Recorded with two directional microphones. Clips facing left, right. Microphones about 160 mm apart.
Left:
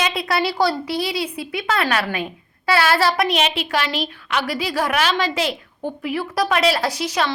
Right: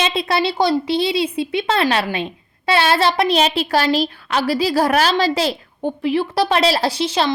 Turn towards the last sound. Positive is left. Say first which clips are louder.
# right 3 dB
turn(degrees=-25)  # may be behind; listen again after turning